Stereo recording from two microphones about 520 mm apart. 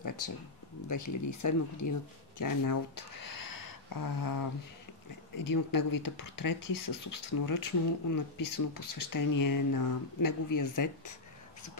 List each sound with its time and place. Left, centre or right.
0.8 s speech: left